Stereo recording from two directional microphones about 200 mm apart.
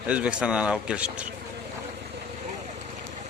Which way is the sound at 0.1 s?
5° right (ahead or behind).